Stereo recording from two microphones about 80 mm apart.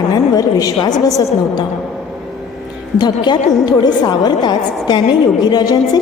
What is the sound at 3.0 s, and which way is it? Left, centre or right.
A woman's voice, left.